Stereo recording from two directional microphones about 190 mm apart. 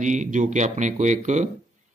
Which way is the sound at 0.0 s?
40° right (ahead or behind).